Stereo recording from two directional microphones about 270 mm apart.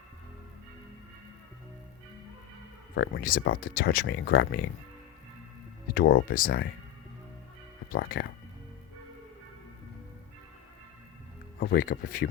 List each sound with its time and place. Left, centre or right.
2.9 s speech: left
5.9 s speech: left
7.9 s speech: left
11.6 s speech: left